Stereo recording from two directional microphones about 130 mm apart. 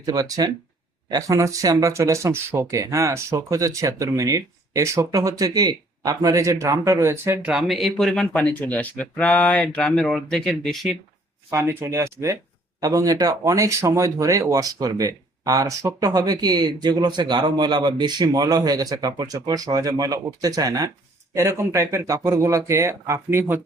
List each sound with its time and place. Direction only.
0.0 s speech: 30° right (ahead or behind)
7.4 s speech: 5° right (ahead or behind)
11.5 s speech: 20° right (ahead or behind)